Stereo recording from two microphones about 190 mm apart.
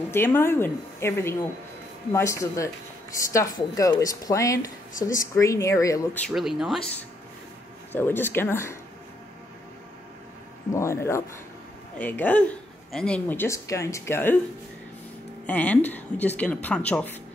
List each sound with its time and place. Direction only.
0.1 s speech: 10° left (ahead or behind)
6.2 s speech: centre (ahead or behind)
7.9 s speech: 10° left (ahead or behind)
10.7 s speech: 15° left (ahead or behind)
15.4 s speech: 10° left (ahead or behind)